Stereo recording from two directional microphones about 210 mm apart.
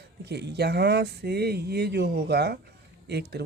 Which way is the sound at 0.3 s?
50° right (ahead or behind).